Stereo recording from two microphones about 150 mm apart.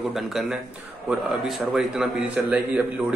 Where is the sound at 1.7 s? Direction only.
5° right (ahead or behind).